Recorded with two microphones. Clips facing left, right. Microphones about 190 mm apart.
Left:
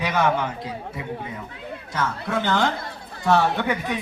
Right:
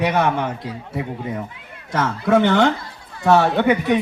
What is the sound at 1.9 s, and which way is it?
A man's voice, 70° right (ahead or behind).